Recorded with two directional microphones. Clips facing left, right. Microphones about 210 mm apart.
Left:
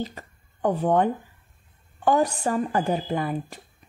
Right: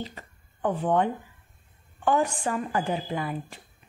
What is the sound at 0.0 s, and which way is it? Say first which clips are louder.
Speech: left 5 dB; 40° left (ahead or behind).